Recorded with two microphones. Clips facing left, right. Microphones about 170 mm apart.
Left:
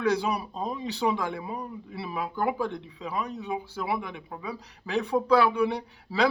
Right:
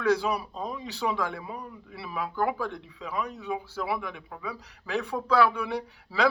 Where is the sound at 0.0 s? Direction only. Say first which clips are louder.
Right 1 dB; 20° left (ahead or behind).